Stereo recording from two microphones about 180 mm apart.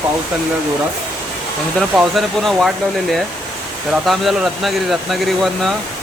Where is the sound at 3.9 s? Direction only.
Centre (ahead or behind).